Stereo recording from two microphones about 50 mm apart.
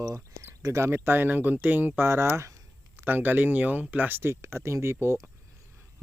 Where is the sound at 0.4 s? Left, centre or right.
Right.